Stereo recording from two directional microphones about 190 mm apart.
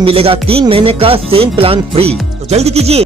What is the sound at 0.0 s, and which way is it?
Music, 30° right (ahead or behind).